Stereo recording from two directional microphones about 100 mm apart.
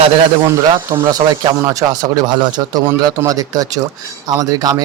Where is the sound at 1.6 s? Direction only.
35° right (ahead or behind).